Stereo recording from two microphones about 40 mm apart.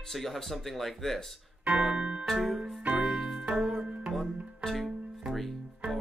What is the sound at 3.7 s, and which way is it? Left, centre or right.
Music, centre.